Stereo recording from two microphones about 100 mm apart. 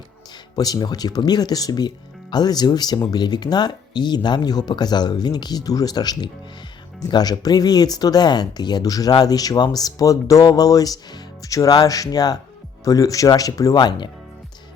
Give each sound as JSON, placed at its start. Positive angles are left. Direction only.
{"t": 0.5, "sound": "speech", "side_deg": 40}